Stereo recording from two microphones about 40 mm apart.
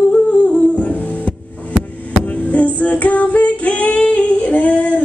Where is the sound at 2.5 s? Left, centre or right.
Left.